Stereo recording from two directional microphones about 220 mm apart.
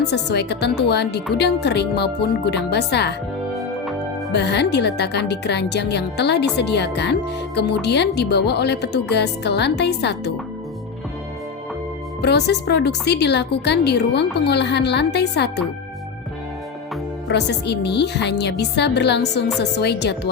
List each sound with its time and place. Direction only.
0.0 s speech: 50° left (ahead or behind)
4.3 s speech: 50° left (ahead or behind)
12.2 s speech: 50° left (ahead or behind)
17.2 s speech: 50° left (ahead or behind)